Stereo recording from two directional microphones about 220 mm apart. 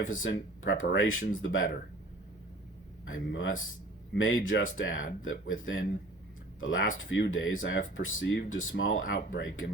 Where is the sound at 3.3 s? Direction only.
65° left (ahead or behind).